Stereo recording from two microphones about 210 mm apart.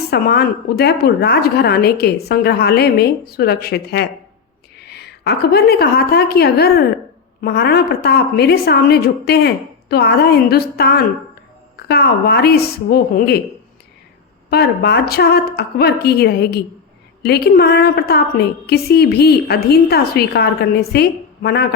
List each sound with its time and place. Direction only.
0.1 s a woman's voice: 50° left (ahead or behind)
14.5 s a woman's voice: 50° left (ahead or behind)